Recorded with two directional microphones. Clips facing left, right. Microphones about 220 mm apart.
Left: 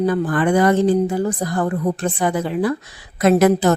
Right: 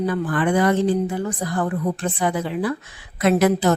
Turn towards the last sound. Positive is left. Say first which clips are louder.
# left 3 dB
turn(degrees=45)  # may be behind; listen again after turning